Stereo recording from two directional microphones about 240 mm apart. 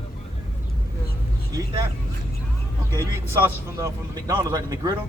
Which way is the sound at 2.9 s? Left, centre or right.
Centre.